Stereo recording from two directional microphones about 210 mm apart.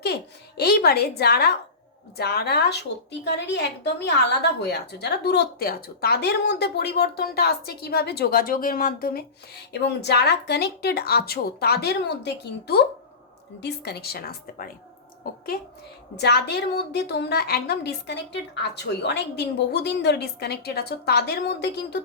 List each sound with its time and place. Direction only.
0.0 s a woman's voice: 50° left (ahead or behind)
16.1 s a woman's voice: 50° left (ahead or behind)